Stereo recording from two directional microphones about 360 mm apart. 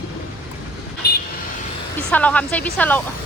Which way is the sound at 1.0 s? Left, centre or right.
Left.